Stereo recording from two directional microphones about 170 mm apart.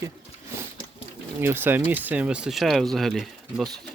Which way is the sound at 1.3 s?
15° right (ahead or behind).